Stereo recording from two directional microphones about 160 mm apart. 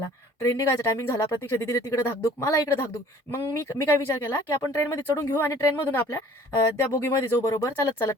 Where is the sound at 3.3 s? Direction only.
15° left (ahead or behind).